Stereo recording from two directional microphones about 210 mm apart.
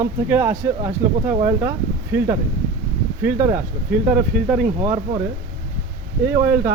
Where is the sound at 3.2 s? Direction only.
15° right (ahead or behind).